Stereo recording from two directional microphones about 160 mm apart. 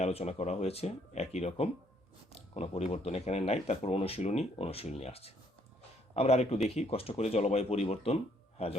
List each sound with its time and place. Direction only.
0.0 s speech: 40° left (ahead or behind)